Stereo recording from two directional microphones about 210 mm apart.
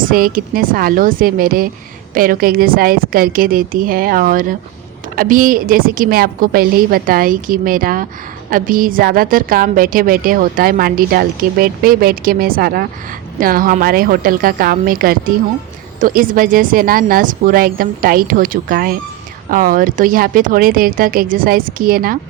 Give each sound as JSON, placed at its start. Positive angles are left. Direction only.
{"t": 0.0, "sound": "a woman's voice", "side_deg": -40}